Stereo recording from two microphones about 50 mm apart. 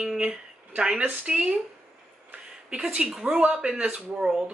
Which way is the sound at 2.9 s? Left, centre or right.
Right.